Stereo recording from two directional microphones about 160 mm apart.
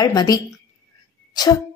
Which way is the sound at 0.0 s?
25° left (ahead or behind).